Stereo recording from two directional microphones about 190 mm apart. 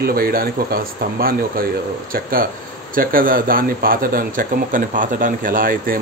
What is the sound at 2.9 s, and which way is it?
Speech, 50° right (ahead or behind).